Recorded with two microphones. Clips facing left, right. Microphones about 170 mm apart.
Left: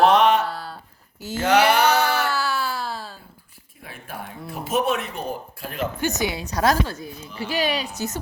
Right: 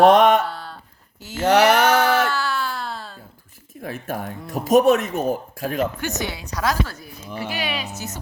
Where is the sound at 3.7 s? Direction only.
45° right (ahead or behind).